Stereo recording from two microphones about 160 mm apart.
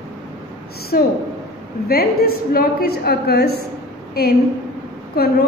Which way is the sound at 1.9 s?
75° left (ahead or behind).